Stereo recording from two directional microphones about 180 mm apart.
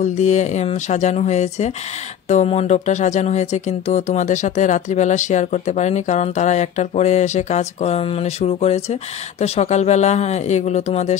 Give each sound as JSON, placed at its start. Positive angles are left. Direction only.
{"t": 0.0, "sound": "speech", "side_deg": 40}